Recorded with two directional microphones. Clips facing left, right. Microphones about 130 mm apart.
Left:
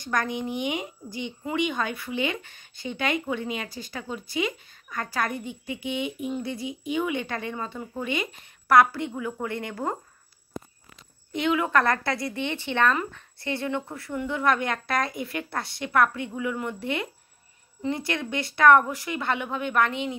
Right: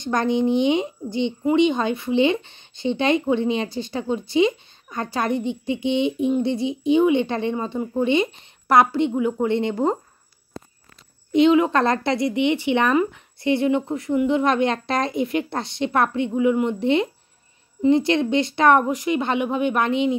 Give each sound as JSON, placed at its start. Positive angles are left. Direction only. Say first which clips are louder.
{"t": 0.0, "sound": "speech", "louder": "right 8 dB", "side_deg": -25}
{"t": 11.3, "sound": "speech", "louder": "right 8 dB", "side_deg": -20}